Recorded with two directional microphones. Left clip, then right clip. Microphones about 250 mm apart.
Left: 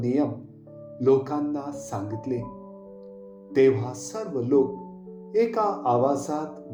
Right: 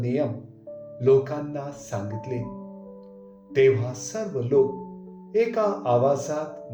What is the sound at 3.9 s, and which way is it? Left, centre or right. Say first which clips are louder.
Speech: right 1 dB; left.